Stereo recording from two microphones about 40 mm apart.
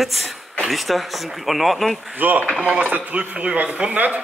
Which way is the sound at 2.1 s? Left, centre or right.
Right.